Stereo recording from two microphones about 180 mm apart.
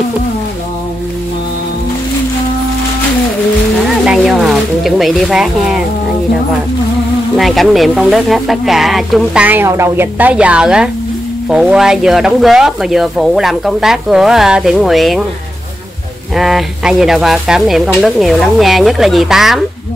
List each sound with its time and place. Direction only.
4.0 s speech: centre (ahead or behind)
7.3 s speech: centre (ahead or behind)
16.3 s speech: centre (ahead or behind)